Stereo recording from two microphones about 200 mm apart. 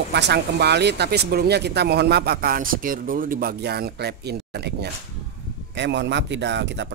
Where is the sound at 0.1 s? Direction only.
55° right (ahead or behind).